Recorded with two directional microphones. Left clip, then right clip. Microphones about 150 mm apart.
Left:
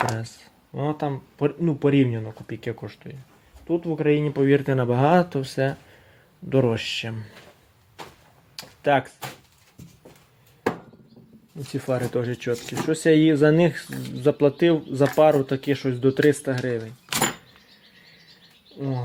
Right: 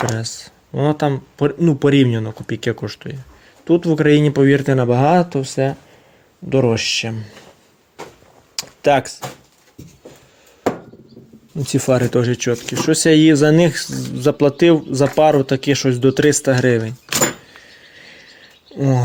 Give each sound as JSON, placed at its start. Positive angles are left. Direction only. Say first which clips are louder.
{"t": 0.0, "sound": "speech", "louder": "right 3 dB", "side_deg": -15}
{"t": 0.4, "sound": "speech", "louder": "right 9 dB", "side_deg": -30}
{"t": 3.7, "sound": "speech", "louder": "right 8 dB", "side_deg": -60}
{"t": 8.5, "sound": "computer keyboard", "louder": "right 6 dB", "side_deg": -35}
{"t": 11.7, "sound": "speech", "louder": "right 9 dB", "side_deg": -45}
{"t": 12.3, "sound": "speech", "louder": "right 8 dB", "side_deg": -25}
{"t": 18.8, "sound": "speech", "louder": "right 12 dB", "side_deg": -50}